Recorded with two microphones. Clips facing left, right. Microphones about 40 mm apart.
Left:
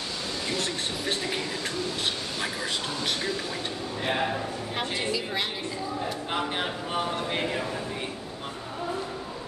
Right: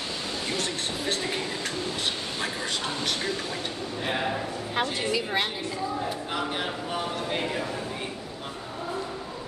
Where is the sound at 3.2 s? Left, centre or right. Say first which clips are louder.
Even; centre.